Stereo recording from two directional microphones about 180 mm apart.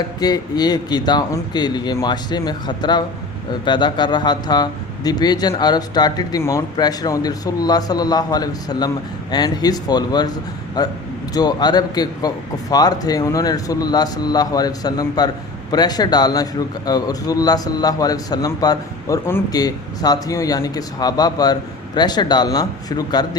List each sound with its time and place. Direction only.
0.2 s a man's voice: 20° left (ahead or behind)